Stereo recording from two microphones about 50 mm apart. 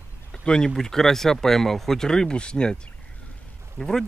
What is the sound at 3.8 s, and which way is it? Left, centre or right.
Speech, centre.